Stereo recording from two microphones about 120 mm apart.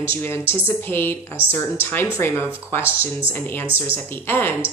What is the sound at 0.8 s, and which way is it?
A woman's voice, 20° left (ahead or behind).